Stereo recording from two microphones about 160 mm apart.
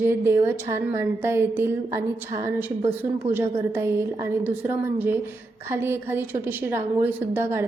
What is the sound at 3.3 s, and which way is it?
A woman's voice, 15° right (ahead or behind).